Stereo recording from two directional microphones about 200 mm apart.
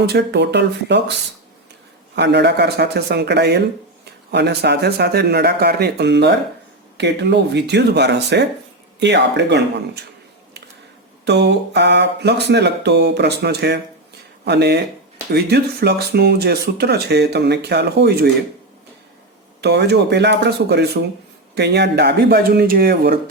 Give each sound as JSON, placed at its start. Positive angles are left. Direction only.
{"t": 0.0, "sound": "speech", "side_deg": -55}
{"t": 2.1, "sound": "speech", "side_deg": -60}
{"t": 11.3, "sound": "speech", "side_deg": -60}
{"t": 19.6, "sound": "speech", "side_deg": -55}